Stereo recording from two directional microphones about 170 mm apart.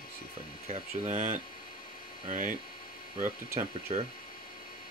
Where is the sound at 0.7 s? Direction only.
45° right (ahead or behind).